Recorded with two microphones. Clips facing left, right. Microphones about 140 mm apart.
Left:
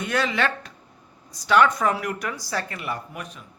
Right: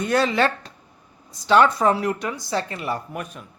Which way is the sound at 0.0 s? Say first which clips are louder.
Right 4 dB; 35° right (ahead or behind).